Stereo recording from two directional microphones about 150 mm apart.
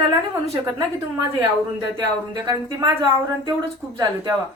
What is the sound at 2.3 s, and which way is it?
Speech, 25° right (ahead or behind).